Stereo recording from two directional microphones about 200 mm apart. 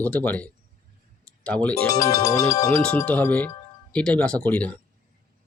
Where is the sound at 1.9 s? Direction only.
15° left (ahead or behind).